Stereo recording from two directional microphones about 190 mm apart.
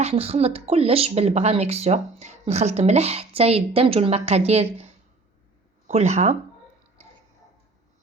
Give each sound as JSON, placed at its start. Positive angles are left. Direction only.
{"t": 0.0, "sound": "speech", "side_deg": -30}
{"t": 5.9, "sound": "speech", "side_deg": -35}